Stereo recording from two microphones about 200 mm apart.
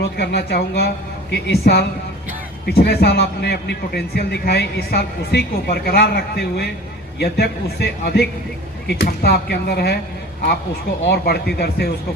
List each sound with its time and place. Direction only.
0.2 s a man's voice: 55° left (ahead or behind)
11.1 s a man's voice: 55° left (ahead or behind)